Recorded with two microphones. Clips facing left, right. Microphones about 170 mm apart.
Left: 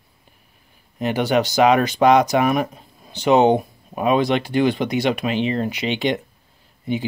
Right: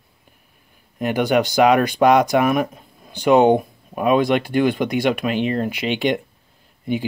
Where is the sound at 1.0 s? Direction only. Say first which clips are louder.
Right 1 dB; 50° right (ahead or behind).